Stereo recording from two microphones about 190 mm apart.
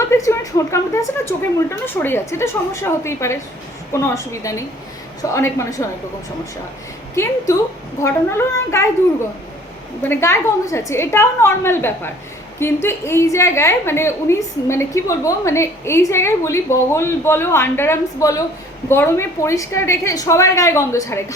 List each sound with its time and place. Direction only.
0.1 s a woman's voice: 15° left (ahead or behind)
8.0 s a woman's voice: 15° left (ahead or behind)
10.0 s a woman's voice: 10° left (ahead or behind)